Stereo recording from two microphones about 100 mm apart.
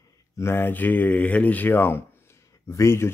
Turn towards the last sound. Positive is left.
turn(degrees=25)  # may be behind; listen again after turning